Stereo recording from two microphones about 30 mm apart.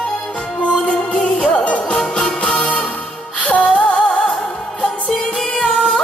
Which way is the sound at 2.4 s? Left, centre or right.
Left.